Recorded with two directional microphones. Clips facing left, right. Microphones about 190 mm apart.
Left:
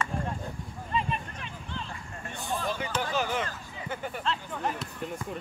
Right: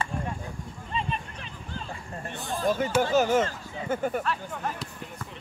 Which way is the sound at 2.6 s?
45° right (ahead or behind).